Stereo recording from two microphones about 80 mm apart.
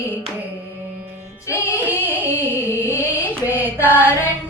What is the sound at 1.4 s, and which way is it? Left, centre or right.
Music, left.